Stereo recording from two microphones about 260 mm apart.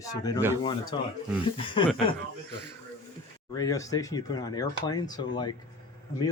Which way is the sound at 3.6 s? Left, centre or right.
Centre.